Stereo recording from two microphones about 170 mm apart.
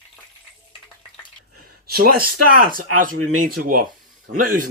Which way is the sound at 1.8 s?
60° right (ahead or behind).